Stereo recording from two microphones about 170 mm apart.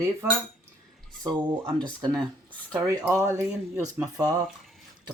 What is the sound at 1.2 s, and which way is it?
Speech, 20° right (ahead or behind).